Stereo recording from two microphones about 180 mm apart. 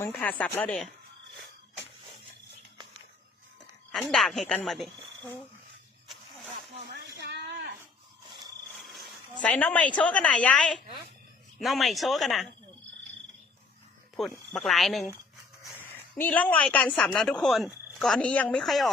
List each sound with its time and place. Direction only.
0.2 s speech: 10° left (ahead or behind)
3.9 s speech: centre (ahead or behind)
6.9 s a sound: 70° right (ahead or behind)
8.7 s a sound: centre (ahead or behind)
9.4 s speech: 10° left (ahead or behind)
14.3 s speech: 5° left (ahead or behind)